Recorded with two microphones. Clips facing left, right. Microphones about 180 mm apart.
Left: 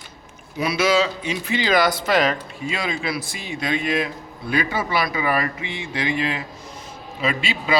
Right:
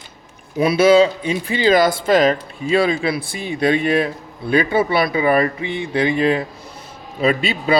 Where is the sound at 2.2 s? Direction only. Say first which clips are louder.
Right 7 dB; 35° right (ahead or behind).